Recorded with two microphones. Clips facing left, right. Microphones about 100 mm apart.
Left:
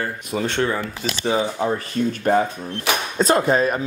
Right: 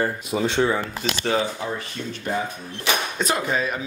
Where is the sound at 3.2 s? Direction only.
35° left (ahead or behind).